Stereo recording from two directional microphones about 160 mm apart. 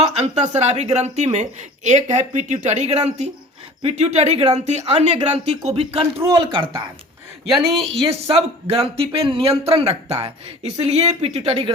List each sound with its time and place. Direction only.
0.2 s speech: 45° right (ahead or behind)
7.4 s speech: centre (ahead or behind)
8.0 s speech: 40° right (ahead or behind)